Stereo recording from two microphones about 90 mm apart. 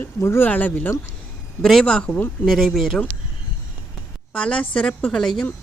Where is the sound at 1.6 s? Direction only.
5° left (ahead or behind).